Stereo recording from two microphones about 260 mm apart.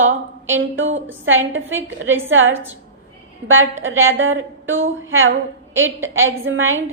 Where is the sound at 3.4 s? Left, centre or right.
Right.